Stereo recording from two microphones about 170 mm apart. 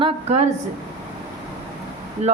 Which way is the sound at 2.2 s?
40° right (ahead or behind).